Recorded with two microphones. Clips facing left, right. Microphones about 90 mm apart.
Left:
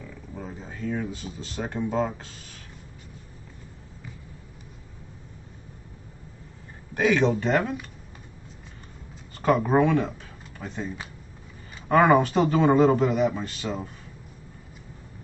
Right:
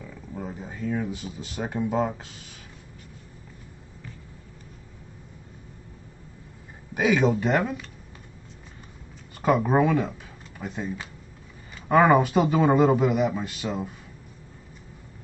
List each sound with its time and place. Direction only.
0.0 s speech: 10° right (ahead or behind)
6.9 s speech: 10° right (ahead or behind)
9.4 s a man's voice: 5° right (ahead or behind)
11.9 s a man's voice: centre (ahead or behind)